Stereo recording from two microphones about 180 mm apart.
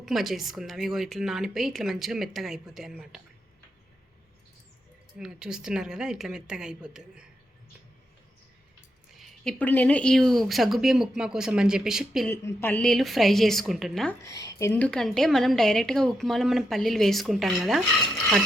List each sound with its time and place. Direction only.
0.0 s a woman's voice: centre (ahead or behind)
5.2 s a woman's voice: 5° right (ahead or behind)
9.1 s a woman's voice: centre (ahead or behind)
12.3 s a woman's voice: 15° left (ahead or behind)
14.3 s speech: 20° left (ahead or behind)
14.7 s a woman's voice: 5° left (ahead or behind)